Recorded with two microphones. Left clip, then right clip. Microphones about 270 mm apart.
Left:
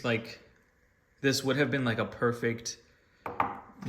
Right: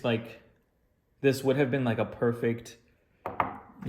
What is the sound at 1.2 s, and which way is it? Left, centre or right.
Speech, right.